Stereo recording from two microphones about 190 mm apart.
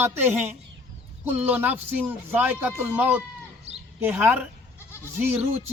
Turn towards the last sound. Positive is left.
turn(degrees=-10)  # may be behind; listen again after turning